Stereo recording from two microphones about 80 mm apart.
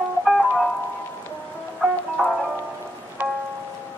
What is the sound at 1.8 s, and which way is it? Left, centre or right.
Music, centre.